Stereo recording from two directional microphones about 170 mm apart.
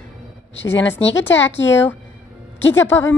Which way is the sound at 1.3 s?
90° left.